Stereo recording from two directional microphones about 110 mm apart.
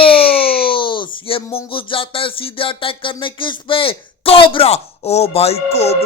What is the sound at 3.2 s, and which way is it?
A man's voice, 50° left (ahead or behind).